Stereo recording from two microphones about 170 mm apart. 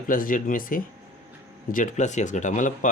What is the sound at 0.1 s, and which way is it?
Speech, 55° left (ahead or behind).